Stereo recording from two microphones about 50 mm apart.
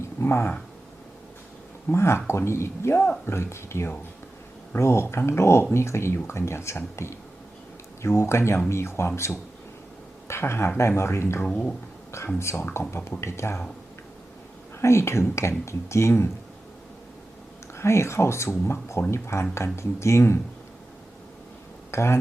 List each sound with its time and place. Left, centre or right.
0.2 s speech: left
1.9 s speech: left
14.8 s speech: left
17.7 s speech: left
19.1 s speech: left
21.9 s speech: left